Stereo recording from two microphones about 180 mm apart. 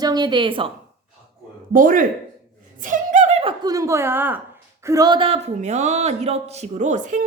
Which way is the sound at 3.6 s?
20° right (ahead or behind).